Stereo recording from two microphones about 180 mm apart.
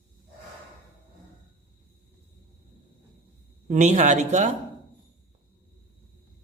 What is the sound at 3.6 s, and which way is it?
Speech, 40° right (ahead or behind).